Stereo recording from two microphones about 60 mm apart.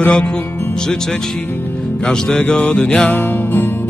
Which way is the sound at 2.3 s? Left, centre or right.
Centre.